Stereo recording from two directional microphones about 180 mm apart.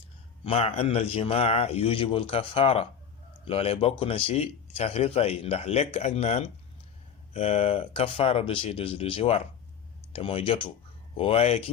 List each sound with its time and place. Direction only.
0.4 s speech: 35° left (ahead or behind)